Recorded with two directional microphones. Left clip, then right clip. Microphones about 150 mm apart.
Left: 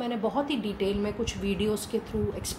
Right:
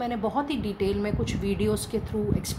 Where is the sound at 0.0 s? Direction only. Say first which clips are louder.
Right 1 dB; 45° right (ahead or behind).